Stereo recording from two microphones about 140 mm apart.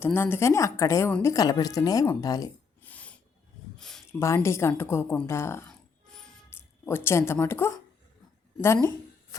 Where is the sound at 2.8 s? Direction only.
10° left (ahead or behind).